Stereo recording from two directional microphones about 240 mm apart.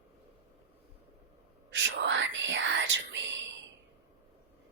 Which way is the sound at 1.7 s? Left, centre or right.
Right.